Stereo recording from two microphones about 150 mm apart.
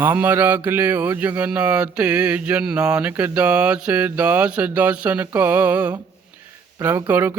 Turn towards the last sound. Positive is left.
turn(degrees=-15)  # may be behind; listen again after turning